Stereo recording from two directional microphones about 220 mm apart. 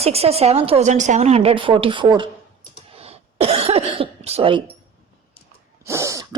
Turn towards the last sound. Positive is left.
turn(degrees=-15)  # may be behind; listen again after turning